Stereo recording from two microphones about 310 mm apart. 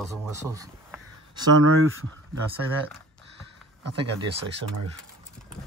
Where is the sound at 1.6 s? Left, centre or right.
Right.